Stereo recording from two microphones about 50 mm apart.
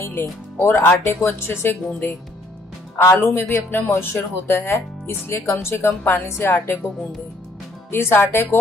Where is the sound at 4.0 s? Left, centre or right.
Left.